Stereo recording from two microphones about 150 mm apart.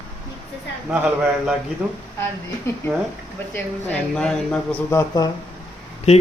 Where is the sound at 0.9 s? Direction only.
5° right (ahead or behind).